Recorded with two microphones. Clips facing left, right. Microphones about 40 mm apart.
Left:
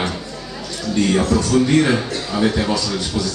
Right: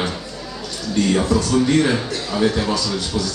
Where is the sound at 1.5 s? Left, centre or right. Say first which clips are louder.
Left 2 dB; centre.